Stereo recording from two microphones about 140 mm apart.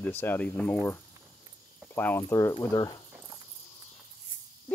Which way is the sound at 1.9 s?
15° left (ahead or behind).